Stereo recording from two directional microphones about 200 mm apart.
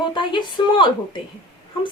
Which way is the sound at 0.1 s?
25° left (ahead or behind).